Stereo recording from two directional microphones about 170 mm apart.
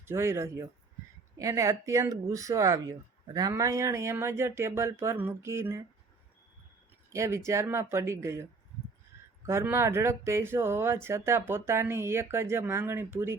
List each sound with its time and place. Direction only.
0.0 s speech: 15° right (ahead or behind)
7.1 s speech: 15° right (ahead or behind)
9.5 s speech: 15° right (ahead or behind)